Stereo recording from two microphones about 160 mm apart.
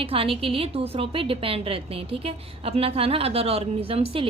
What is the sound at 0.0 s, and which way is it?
A woman's voice, 35° right (ahead or behind).